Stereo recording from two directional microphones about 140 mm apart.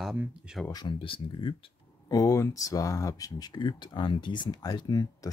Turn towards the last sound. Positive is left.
turn(degrees=25)  # may be behind; listen again after turning